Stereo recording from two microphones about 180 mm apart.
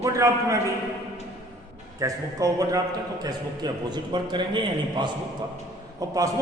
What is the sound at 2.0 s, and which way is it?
A man's voice, 20° right (ahead or behind).